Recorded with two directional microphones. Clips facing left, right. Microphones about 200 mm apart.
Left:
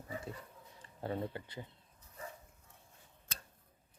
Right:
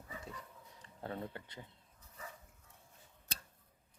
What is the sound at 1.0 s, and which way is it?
Speech, 10° left (ahead or behind).